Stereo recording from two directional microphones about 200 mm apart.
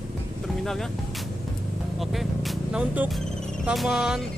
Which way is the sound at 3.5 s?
Centre (ahead or behind).